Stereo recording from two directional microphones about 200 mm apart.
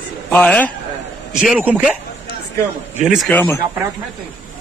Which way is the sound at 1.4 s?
5° right (ahead or behind).